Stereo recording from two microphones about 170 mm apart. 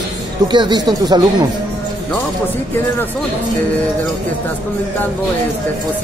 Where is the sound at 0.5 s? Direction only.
25° right (ahead or behind).